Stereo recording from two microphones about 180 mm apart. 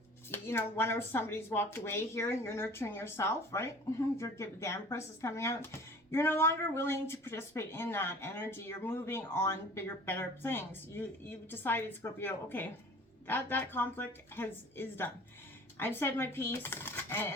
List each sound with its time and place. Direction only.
0.3 s speech: 15° left (ahead or behind)